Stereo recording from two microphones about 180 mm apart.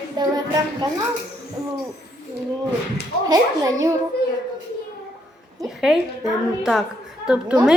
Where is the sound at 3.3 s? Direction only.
20° right (ahead or behind).